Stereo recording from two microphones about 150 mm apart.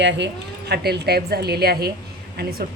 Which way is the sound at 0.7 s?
90° right.